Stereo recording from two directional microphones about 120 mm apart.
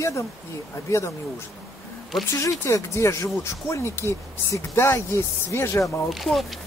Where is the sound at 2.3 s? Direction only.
25° left (ahead or behind).